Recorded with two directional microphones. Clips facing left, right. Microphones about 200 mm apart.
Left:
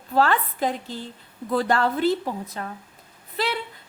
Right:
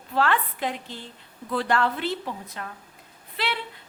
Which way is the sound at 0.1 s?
40° left (ahead or behind).